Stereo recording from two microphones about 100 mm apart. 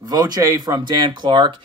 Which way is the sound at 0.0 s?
40° right (ahead or behind).